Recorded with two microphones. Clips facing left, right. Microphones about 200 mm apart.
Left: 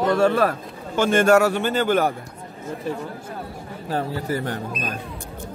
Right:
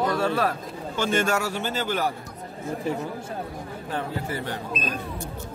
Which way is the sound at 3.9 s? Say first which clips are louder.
Left 5 dB; 40° left (ahead or behind).